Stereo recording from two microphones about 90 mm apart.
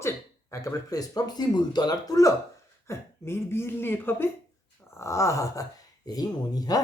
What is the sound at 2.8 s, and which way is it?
Speech, 25° left (ahead or behind).